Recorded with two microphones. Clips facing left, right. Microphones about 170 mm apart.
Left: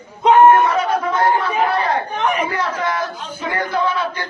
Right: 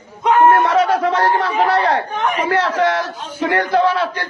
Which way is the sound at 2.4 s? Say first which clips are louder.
Right 5 dB; 75° right (ahead or behind).